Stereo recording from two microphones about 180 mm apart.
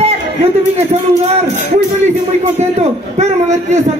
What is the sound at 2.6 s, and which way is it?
A man's voice, 40° right (ahead or behind).